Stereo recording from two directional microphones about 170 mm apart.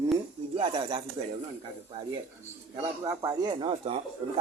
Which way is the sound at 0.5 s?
30° right (ahead or behind).